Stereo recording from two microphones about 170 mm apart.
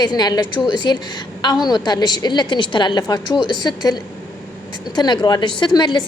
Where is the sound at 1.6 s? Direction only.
25° left (ahead or behind).